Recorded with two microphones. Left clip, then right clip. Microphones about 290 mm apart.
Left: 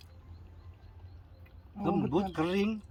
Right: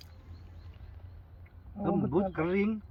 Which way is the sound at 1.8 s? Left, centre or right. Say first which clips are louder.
Right 1 dB; centre.